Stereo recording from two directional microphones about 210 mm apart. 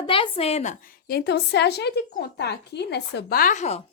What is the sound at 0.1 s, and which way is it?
Speech, 25° left (ahead or behind).